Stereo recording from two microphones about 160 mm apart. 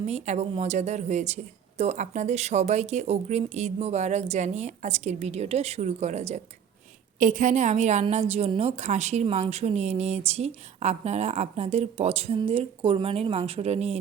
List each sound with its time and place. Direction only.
0.0 s a woman's voice: 40° right (ahead or behind)